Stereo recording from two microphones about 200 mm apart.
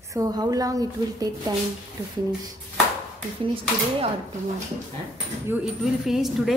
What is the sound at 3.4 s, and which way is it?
Speech, 25° right (ahead or behind).